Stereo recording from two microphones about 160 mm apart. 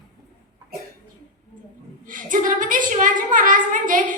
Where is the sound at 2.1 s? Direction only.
55° right (ahead or behind).